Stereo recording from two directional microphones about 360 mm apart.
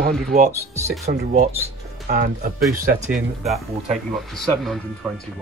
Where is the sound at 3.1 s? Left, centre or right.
Centre.